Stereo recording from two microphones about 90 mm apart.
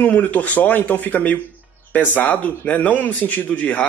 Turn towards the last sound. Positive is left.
turn(degrees=20)  # may be behind; listen again after turning